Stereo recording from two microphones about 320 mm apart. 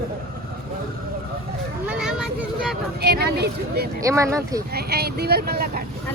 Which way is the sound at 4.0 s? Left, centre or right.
Centre.